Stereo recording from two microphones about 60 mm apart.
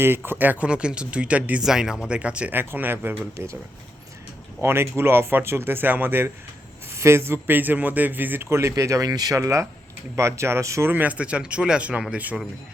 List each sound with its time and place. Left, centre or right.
0.0 s speech: right
0.7 s speech: centre
1.6 s speech: centre
2.5 s speech: right
4.6 s speech: right
6.9 s speech: right
8.4 s speech: right
8.7 s speech: right
10.2 s speech: right
10.8 s speech: right